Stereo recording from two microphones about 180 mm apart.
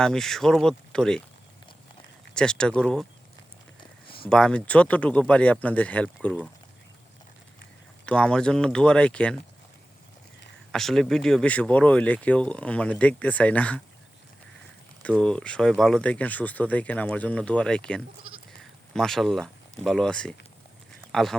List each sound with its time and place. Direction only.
0.0 s speech: centre (ahead or behind)
2.3 s speech: 5° left (ahead or behind)
4.3 s speech: 5° left (ahead or behind)
8.0 s speech: 5° left (ahead or behind)
10.7 s speech: centre (ahead or behind)
15.0 s speech: 5° left (ahead or behind)